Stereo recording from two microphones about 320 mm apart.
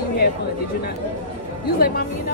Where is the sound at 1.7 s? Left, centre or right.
Left.